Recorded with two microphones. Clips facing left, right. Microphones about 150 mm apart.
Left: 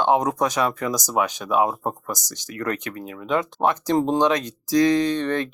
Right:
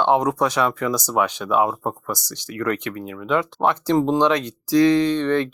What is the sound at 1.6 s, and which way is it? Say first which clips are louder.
Speech: right 1 dB; 30° left (ahead or behind).